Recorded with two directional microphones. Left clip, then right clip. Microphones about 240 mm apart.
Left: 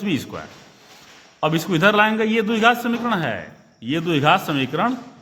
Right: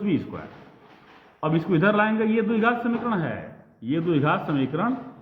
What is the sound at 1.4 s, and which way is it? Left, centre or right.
A man's voice, left.